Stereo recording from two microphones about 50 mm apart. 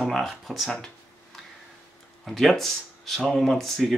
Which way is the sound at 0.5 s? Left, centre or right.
Centre.